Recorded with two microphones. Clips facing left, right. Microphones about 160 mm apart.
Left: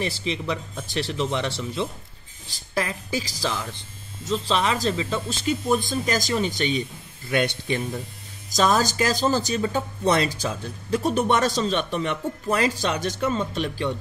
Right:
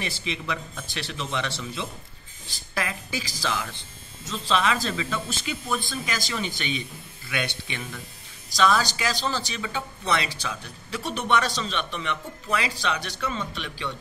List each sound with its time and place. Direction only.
0.0 s a woman's voice: 30° left (ahead or behind)
4.3 s speech: 20° left (ahead or behind)
5.4 s speech: 40° left (ahead or behind)